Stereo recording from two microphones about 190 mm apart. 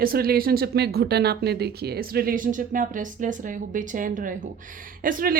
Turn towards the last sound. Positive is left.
turn(degrees=-50)  # may be behind; listen again after turning